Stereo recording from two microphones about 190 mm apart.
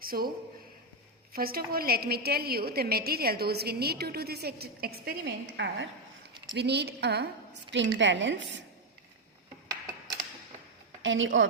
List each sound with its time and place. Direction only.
0.0 s a man's voice: 50° right (ahead or behind)
1.3 s a woman's voice: 50° right (ahead or behind)
7.7 s a woman's voice: 70° right (ahead or behind)
11.0 s a woman's voice: 85° right